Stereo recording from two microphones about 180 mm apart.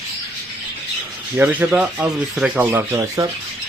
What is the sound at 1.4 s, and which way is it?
Speech, 10° right (ahead or behind).